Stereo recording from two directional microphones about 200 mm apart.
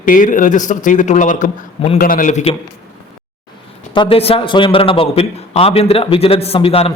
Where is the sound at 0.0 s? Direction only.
40° left (ahead or behind).